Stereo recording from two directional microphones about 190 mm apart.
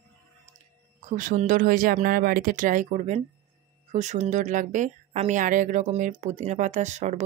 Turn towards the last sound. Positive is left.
turn(degrees=-40)  # may be behind; listen again after turning